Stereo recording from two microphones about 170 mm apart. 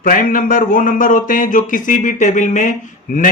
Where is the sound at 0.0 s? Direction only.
55° left (ahead or behind).